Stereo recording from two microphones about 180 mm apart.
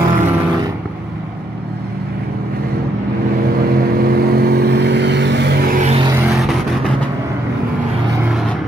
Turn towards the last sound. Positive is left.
turn(degrees=0)  # may be behind; listen again after turning